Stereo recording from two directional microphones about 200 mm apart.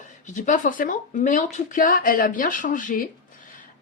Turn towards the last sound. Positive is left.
turn(degrees=45)  # may be behind; listen again after turning